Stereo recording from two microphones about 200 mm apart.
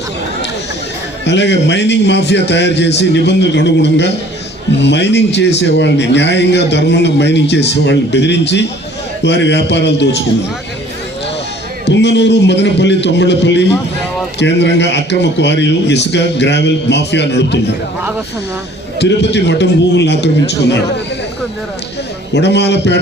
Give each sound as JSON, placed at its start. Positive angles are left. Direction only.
{"t": 1.2, "sound": "a man's voice", "side_deg": 60}
{"t": 11.9, "sound": "a man's voice", "side_deg": 60}
{"t": 18.9, "sound": "a man's voice", "side_deg": 60}
{"t": 22.3, "sound": "a man's voice", "side_deg": 60}